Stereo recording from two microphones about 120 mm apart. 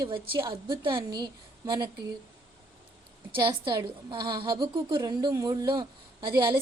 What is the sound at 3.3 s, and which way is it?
A woman's voice, 40° right (ahead or behind).